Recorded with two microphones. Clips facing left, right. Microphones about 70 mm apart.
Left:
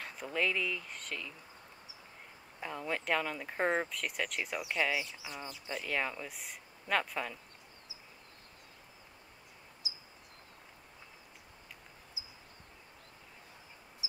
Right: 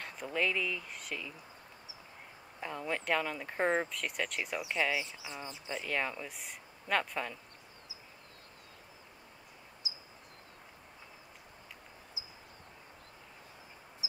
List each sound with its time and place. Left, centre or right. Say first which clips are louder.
0.0 s speech: even; centre
2.6 s speech: right 1 dB; centre
5.2 s speech: even; right
5.9 s speech: even; centre